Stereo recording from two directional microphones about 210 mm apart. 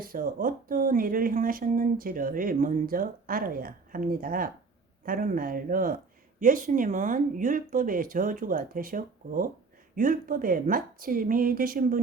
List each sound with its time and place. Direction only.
0.0 s speech: 45° right (ahead or behind)